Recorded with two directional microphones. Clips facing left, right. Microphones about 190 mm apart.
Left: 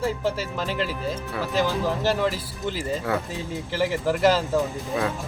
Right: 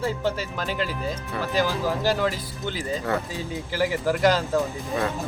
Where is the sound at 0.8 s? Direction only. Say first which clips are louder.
Left 1 dB; centre (ahead or behind).